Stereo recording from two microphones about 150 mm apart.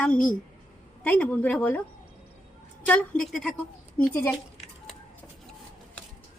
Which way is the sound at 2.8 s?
10° left (ahead or behind).